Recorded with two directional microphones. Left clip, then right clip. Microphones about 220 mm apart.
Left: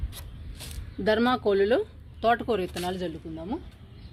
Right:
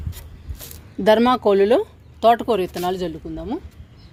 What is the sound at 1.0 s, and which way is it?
Speech, 35° right (ahead or behind).